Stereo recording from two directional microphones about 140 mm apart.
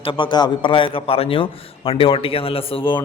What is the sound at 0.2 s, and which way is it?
A man's voice, 35° left (ahead or behind).